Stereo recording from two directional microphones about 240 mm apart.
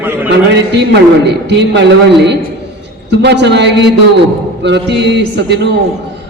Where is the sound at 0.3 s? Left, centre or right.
Right.